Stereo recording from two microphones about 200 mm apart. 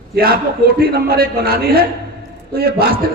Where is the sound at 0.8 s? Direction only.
50° right (ahead or behind).